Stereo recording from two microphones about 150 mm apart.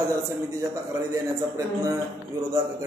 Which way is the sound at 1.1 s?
20° right (ahead or behind).